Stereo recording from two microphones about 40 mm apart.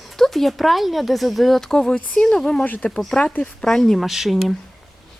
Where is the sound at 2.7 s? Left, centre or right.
Left.